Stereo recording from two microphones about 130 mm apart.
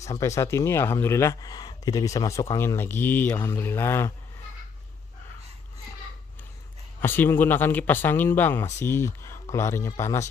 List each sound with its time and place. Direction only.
0.1 s speech: 25° left (ahead or behind)
7.0 s speech: 15° left (ahead or behind)